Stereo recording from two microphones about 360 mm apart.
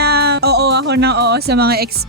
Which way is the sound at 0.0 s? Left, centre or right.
Right.